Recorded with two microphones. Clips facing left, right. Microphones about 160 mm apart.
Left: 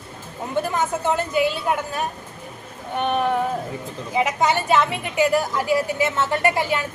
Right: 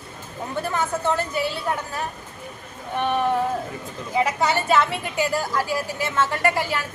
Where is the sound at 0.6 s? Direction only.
15° left (ahead or behind).